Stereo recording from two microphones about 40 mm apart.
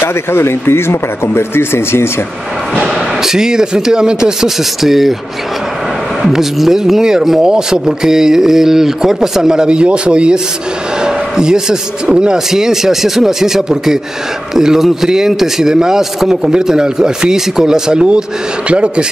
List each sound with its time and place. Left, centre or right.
0.0 s speech: left
2.8 s speech: centre
4.8 s speech: centre
6.2 s speech: centre
16.5 s speech: centre
18.7 s speech: right